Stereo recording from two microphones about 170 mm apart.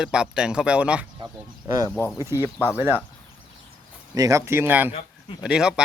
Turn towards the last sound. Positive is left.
turn(degrees=-5)  # may be behind; listen again after turning